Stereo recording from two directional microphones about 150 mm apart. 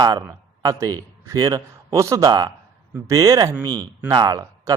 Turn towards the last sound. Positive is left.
turn(degrees=-25)  # may be behind; listen again after turning